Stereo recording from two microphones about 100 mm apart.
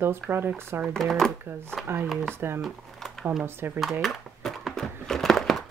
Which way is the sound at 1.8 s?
20° right (ahead or behind).